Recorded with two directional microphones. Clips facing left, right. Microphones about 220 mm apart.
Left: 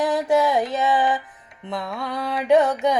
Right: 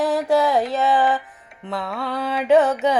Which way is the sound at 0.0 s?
Centre (ahead or behind).